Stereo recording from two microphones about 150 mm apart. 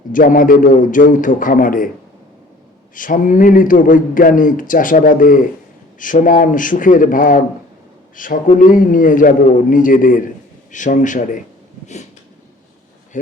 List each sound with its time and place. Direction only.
0.1 s speech: 65° left (ahead or behind)
2.9 s speech: 60° left (ahead or behind)